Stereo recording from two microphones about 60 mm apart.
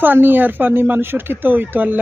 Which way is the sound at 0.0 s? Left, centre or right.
Right.